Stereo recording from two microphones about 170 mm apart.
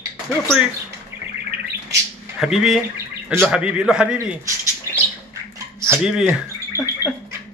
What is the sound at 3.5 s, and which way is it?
Speech, 5° right (ahead or behind).